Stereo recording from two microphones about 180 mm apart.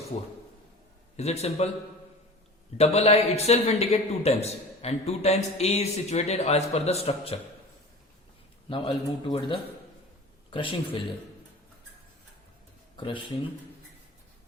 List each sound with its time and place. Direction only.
1.1 s a man's voice: 35° left (ahead or behind)
2.7 s a man's voice: 35° left (ahead or behind)
8.7 s speech: 30° left (ahead or behind)
13.0 s speech: 25° left (ahead or behind)